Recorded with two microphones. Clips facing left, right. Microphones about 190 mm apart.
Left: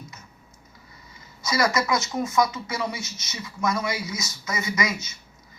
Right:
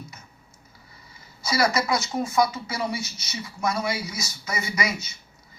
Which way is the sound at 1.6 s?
30° right (ahead or behind).